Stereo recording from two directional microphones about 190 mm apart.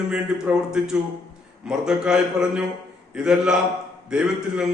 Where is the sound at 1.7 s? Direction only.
5° right (ahead or behind).